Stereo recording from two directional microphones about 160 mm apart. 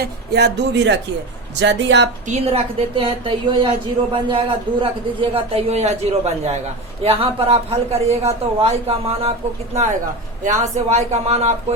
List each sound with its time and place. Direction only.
0.0 s speech: 90° right
2.2 s a woman's voice: 40° right (ahead or behind)
10.4 s speech: 45° right (ahead or behind)